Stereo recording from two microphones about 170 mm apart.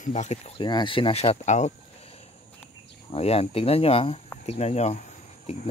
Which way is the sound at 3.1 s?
35° left (ahead or behind).